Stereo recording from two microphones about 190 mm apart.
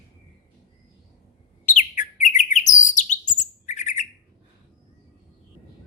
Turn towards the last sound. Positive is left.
turn(degrees=40)  # may be behind; listen again after turning